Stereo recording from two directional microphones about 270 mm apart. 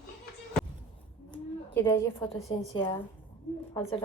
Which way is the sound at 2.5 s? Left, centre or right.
Left.